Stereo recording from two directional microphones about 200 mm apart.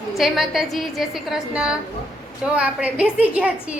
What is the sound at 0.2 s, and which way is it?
A woman's voice, centre (ahead or behind).